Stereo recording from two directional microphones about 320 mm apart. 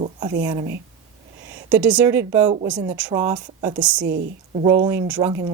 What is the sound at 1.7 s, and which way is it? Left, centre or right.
Speech, centre.